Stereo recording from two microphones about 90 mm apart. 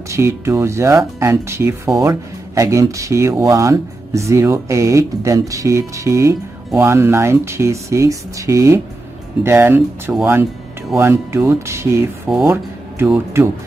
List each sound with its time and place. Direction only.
0.1 s speech: 35° right (ahead or behind); by 10.2 s 15° right (ahead or behind)
11.0 s speech: 30° right (ahead or behind)